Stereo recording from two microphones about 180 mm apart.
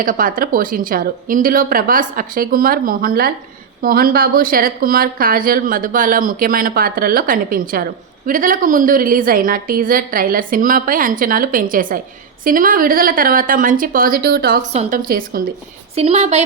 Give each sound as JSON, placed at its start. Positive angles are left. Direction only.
{"t": 0.0, "sound": "speech", "side_deg": -50}
{"t": 14.7, "sound": "speech", "side_deg": -40}
{"t": 16.0, "sound": "a woman's voice", "side_deg": -35}